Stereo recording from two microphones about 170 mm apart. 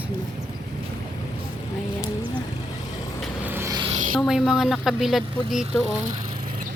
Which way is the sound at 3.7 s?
30° right (ahead or behind).